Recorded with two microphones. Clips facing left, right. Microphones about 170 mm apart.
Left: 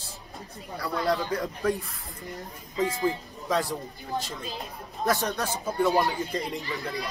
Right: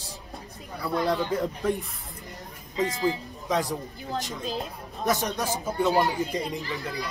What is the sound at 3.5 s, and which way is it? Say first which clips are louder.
Speech: even; 20° right (ahead or behind).